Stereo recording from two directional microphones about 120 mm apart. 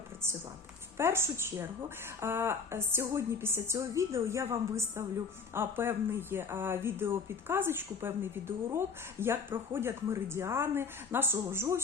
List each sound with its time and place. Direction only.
0.9 s speech: 20° right (ahead or behind)